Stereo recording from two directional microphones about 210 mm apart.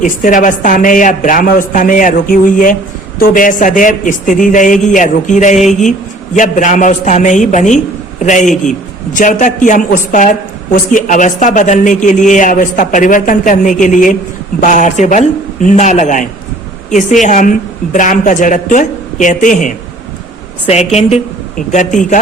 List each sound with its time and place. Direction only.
0.0 s a woman's voice: 40° left (ahead or behind)